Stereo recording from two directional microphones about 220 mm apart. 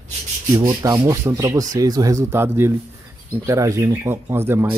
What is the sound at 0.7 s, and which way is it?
Speech, 15° right (ahead or behind).